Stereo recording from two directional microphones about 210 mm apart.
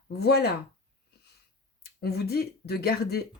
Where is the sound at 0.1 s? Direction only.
50° left (ahead or behind).